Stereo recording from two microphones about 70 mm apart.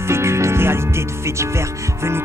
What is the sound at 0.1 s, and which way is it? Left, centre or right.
Music, right.